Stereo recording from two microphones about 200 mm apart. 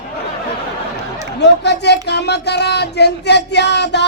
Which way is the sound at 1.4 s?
60° left (ahead or behind).